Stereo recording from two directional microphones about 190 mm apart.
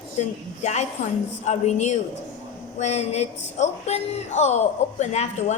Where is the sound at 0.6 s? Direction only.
35° left (ahead or behind).